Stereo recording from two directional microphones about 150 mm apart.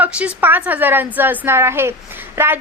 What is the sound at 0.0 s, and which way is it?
A woman's voice, 10° right (ahead or behind).